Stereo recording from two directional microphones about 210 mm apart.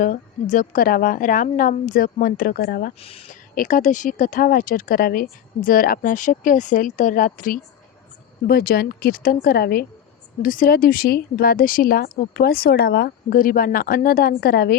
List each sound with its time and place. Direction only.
0.0 s speech: 40° left (ahead or behind)
3.0 s speech: 25° left (ahead or behind)
3.5 s speech: 40° left (ahead or behind)